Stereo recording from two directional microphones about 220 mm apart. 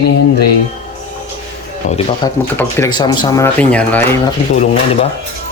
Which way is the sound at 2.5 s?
15° left (ahead or behind).